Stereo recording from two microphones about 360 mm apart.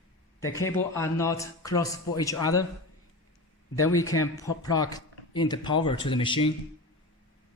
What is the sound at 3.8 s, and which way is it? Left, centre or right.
Speech, centre.